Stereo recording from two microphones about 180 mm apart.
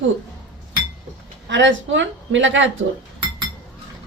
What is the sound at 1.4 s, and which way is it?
A woman's voice, 85° right.